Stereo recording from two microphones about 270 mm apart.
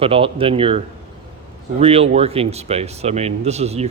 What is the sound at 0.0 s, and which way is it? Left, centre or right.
Speech, right.